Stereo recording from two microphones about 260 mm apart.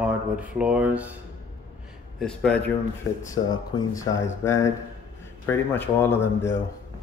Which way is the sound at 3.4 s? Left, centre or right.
Left.